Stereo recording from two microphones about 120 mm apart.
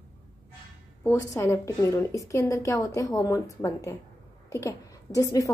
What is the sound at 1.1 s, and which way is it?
A woman's voice, 25° left (ahead or behind).